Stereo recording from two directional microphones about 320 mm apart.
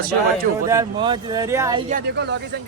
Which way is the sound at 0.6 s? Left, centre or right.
Centre.